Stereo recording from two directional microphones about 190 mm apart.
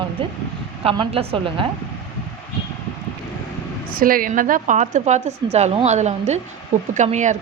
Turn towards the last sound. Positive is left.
turn(degrees=-40)  # may be behind; listen again after turning